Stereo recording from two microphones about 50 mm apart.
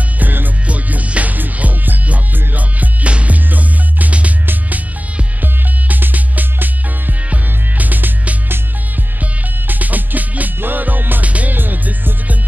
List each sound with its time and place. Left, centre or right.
0.2 s music: right
0.7 s music: right
9.7 s music: right
11.5 s music: right